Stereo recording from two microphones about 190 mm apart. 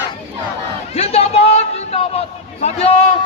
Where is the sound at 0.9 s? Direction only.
30° left (ahead or behind).